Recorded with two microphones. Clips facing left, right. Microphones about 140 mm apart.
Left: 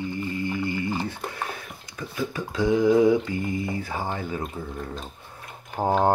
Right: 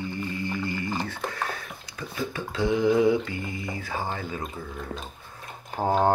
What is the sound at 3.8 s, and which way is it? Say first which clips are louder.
Speech: left 1 dB; 15° left (ahead or behind).